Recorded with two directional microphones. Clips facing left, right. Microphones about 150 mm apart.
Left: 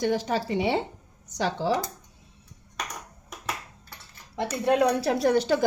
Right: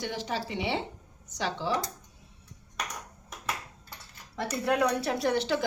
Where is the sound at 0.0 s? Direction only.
45° left (ahead or behind).